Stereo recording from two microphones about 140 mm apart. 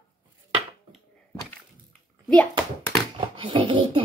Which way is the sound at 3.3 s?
35° right (ahead or behind).